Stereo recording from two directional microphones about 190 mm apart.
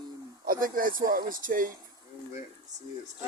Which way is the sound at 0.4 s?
50° right (ahead or behind).